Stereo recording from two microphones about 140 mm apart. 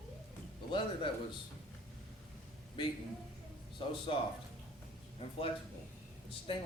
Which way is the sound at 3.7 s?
40° left (ahead or behind).